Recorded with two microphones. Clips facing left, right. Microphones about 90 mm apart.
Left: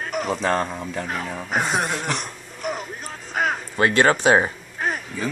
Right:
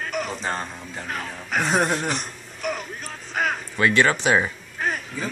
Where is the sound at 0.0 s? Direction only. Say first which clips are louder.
Left 1 dB; 40° left (ahead or behind).